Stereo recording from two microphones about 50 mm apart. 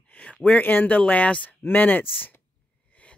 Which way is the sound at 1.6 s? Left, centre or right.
Left.